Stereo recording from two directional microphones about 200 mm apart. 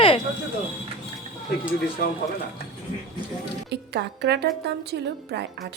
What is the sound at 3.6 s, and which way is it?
A woman's voice, 60° right (ahead or behind).